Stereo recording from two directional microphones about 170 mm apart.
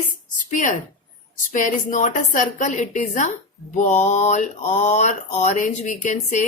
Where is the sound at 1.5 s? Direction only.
50° left (ahead or behind).